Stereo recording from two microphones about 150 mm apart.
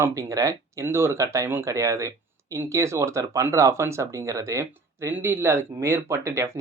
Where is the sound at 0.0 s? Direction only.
20° right (ahead or behind).